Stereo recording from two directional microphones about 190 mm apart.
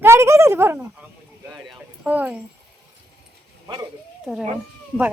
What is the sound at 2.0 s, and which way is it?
Speech, 10° right (ahead or behind).